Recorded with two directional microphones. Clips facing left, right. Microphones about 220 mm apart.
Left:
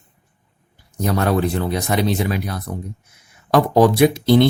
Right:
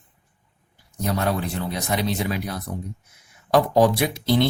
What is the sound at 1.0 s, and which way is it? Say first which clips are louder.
Speech: left 6 dB; 65° left (ahead or behind).